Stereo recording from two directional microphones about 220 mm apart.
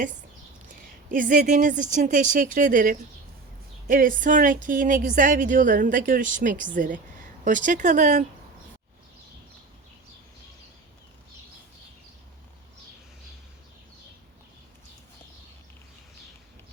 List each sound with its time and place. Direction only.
1.1 s a woman's voice: 40° right (ahead or behind)